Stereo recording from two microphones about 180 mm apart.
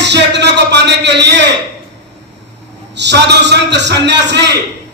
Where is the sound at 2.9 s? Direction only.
70° right (ahead or behind).